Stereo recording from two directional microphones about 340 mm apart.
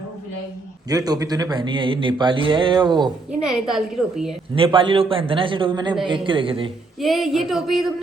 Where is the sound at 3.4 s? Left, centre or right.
Centre.